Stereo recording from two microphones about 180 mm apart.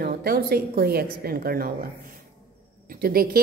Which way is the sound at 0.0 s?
55° right (ahead or behind).